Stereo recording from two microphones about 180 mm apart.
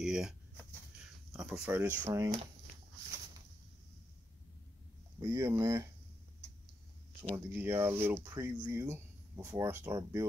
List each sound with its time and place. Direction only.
0.0 s a sound: centre (ahead or behind)
1.3 s speech: 5° right (ahead or behind)
2.0 s speech: 20° right (ahead or behind)
5.2 s speech: 15° right (ahead or behind)
7.3 s speech: 10° right (ahead or behind)